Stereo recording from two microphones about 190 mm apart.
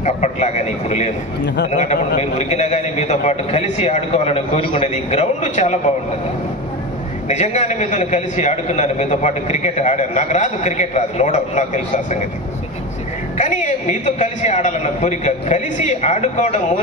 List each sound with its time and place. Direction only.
0.0 s a man's voice: 35° left (ahead or behind)
7.2 s a man's voice: 35° left (ahead or behind)
13.4 s a man's voice: 40° left (ahead or behind)